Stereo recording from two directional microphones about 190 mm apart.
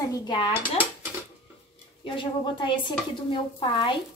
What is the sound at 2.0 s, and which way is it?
Speech, 25° left (ahead or behind).